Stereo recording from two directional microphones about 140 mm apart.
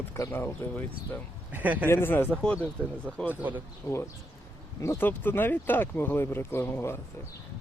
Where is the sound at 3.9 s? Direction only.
20° left (ahead or behind).